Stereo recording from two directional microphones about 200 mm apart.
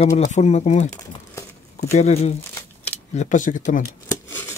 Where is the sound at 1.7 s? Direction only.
35° left (ahead or behind).